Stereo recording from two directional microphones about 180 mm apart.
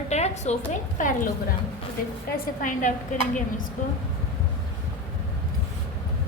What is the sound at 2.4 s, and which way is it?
Speech, 45° left (ahead or behind).